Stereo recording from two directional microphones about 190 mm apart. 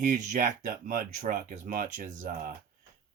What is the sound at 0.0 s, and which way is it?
Speech, 40° right (ahead or behind).